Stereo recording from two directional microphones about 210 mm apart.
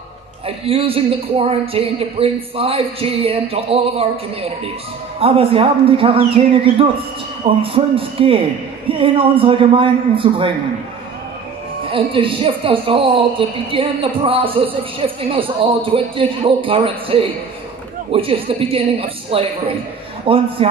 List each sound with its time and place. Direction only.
0.7 s speech: 25° right (ahead or behind)
11.9 s speech: 25° right (ahead or behind)